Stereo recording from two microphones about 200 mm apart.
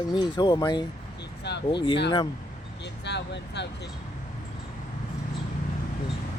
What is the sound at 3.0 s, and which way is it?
Speech, 60° left (ahead or behind).